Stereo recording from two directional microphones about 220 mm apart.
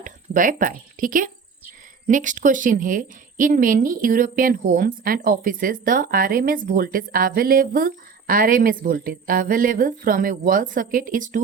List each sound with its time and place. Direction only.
0.0 s a woman's voice: 40° right (ahead or behind)